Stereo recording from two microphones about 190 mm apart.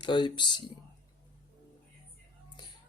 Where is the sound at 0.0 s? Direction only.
25° left (ahead or behind).